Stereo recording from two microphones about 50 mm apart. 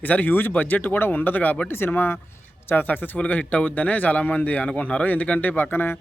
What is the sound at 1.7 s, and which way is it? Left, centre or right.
Speech, left.